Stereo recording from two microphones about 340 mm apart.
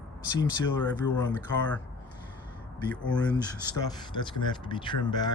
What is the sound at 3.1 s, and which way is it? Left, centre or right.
Speech, centre.